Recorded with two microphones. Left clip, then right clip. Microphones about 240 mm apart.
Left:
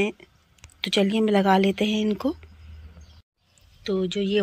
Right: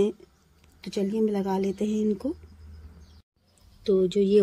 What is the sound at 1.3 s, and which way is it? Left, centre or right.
Speech, left.